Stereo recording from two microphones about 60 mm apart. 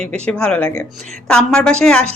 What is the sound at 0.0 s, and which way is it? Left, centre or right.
A woman's voice, centre.